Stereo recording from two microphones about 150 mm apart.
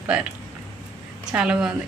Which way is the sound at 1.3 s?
5° right (ahead or behind).